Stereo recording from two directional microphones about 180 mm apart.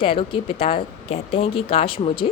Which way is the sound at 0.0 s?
30° left (ahead or behind).